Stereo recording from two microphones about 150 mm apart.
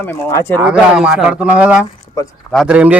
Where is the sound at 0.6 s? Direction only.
5° right (ahead or behind).